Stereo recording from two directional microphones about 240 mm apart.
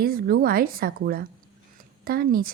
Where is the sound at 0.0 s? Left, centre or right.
Right.